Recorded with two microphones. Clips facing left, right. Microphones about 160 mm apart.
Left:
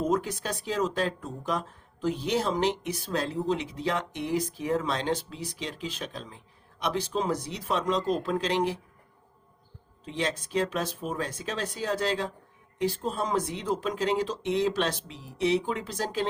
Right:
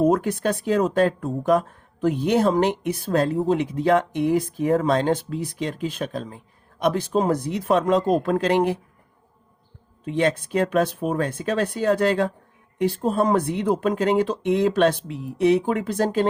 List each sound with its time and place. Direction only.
0.0 s speech: 55° right (ahead or behind)
10.0 s speech: 55° right (ahead or behind)